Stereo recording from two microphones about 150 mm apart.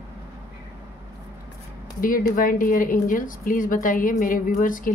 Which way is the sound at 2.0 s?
65° left (ahead or behind).